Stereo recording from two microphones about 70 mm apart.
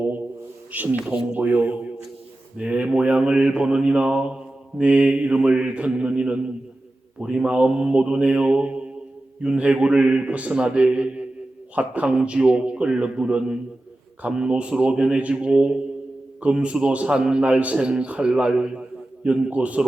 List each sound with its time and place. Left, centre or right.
0.7 s a man's voice: right